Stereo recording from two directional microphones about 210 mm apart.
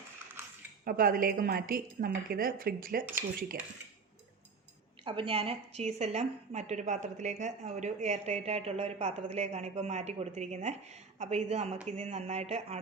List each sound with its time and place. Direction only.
0.9 s a woman's voice: 45° right (ahead or behind)
5.0 s a woman's voice: 25° right (ahead or behind)